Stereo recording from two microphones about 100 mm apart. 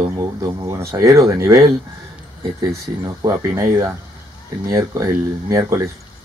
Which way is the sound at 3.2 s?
30° right (ahead or behind).